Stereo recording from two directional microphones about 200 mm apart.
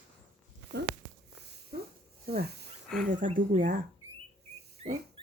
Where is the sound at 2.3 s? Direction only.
50° right (ahead or behind).